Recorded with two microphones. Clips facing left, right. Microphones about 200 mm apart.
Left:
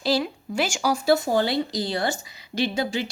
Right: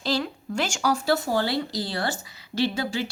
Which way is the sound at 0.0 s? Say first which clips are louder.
Left 3 dB; 10° left (ahead or behind).